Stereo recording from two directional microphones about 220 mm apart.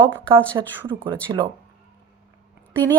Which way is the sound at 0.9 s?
20° right (ahead or behind).